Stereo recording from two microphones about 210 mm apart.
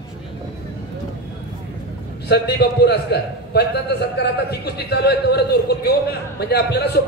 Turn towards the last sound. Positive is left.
turn(degrees=50)  # may be behind; listen again after turning